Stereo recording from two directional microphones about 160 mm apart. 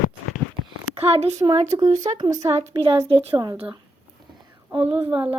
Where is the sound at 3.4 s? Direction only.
25° right (ahead or behind).